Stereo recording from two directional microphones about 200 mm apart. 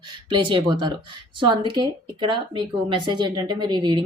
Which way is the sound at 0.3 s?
25° right (ahead or behind).